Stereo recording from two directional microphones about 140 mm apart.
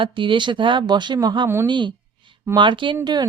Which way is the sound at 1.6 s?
35° right (ahead or behind).